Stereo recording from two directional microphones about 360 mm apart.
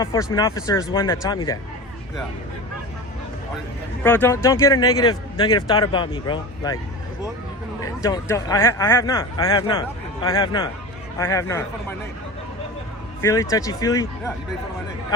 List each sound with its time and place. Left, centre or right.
0.0 s a man's voice: centre
4.0 s a man's voice: centre
8.0 s a man's voice: centre
13.2 s a man's voice: centre